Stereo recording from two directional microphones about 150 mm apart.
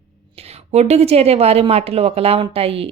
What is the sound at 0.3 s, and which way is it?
A woman's voice, 45° right (ahead or behind).